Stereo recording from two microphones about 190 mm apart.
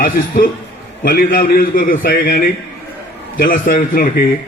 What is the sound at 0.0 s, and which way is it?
A man's voice, 50° left (ahead or behind).